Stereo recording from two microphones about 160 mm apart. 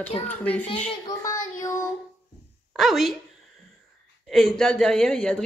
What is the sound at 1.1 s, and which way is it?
Speech, 20° left (ahead or behind).